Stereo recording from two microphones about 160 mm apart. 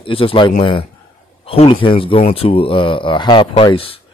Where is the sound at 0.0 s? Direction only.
35° left (ahead or behind).